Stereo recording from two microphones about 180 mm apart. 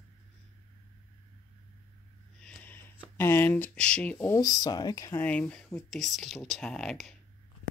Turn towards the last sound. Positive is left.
turn(degrees=5)  # may be behind; listen again after turning